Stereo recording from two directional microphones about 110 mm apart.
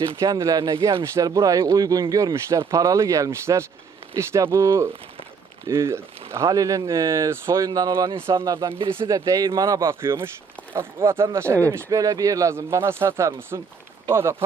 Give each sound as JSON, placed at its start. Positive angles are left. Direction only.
{"t": 0.2, "sound": "speech", "side_deg": -30}
{"t": 8.3, "sound": "speech", "side_deg": -25}
{"t": 9.9, "sound": "speech", "side_deg": -20}